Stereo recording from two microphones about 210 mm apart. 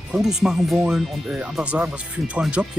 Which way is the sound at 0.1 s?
Centre (ahead or behind).